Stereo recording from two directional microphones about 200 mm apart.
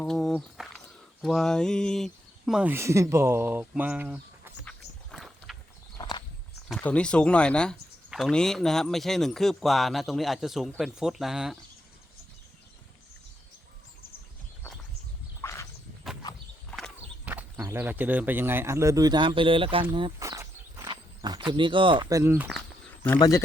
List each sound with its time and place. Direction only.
0.0 s a sound: centre (ahead or behind)
1.2 s speech: centre (ahead or behind)
5.1 s rowboat: centre (ahead or behind)
6.0 s walk: 20° left (ahead or behind)
6.7 s speech: 5° left (ahead or behind)
15.4 s a sound: 15° left (ahead or behind)
16.7 s horse: centre (ahead or behind)
17.3 s speech: 10° right (ahead or behind)
22.2 s speech: 10° right (ahead or behind)
23.0 s speech: 15° left (ahead or behind)